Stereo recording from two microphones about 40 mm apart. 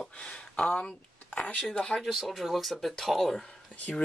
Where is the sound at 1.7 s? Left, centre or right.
Centre.